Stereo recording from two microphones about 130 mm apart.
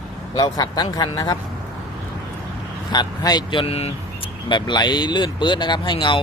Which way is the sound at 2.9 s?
35° left (ahead or behind).